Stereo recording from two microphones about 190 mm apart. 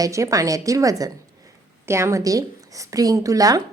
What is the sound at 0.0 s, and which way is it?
A woman's voice, 15° right (ahead or behind).